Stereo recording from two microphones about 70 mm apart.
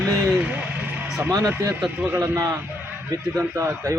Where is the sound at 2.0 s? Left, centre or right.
Right.